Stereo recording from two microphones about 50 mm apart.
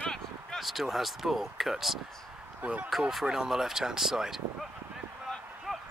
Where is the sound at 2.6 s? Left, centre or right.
Right.